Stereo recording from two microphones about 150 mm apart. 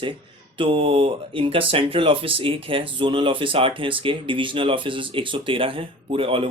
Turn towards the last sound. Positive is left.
turn(degrees=-40)  # may be behind; listen again after turning